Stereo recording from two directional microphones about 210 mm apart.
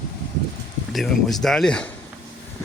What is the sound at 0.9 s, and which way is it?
Speech, centre (ahead or behind).